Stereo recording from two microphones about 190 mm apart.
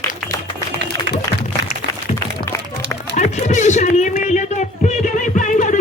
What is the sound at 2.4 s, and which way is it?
Music, 15° left (ahead or behind).